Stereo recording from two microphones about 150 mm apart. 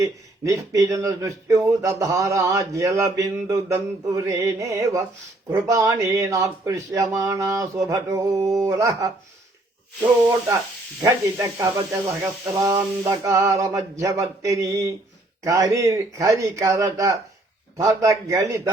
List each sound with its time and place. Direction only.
0.0 s speech: 25° right (ahead or behind)
11.0 s speech: 25° right (ahead or behind)